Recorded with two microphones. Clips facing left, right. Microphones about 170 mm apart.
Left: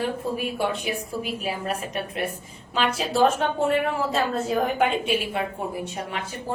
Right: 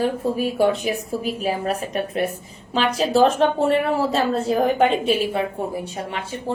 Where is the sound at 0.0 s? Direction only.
40° right (ahead or behind).